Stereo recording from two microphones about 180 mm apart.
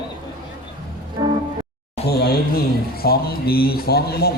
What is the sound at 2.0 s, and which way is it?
A man's voice, 60° left (ahead or behind).